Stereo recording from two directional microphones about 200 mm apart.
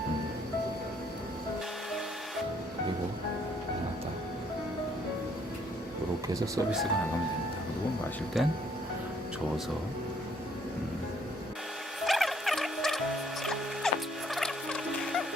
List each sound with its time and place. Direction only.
6.2 s speech: 15° right (ahead or behind)
8.4 s speech: centre (ahead or behind)
12.0 s music: centre (ahead or behind)